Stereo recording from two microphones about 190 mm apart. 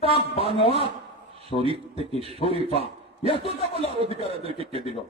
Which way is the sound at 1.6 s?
30° right (ahead or behind).